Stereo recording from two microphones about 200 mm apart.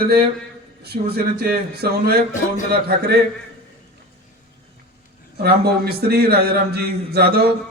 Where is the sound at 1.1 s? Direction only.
50° right (ahead or behind).